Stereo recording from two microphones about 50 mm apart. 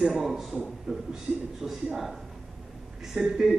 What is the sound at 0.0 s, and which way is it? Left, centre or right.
A man's voice, centre.